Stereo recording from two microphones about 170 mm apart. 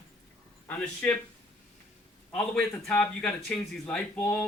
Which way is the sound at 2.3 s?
10° left (ahead or behind).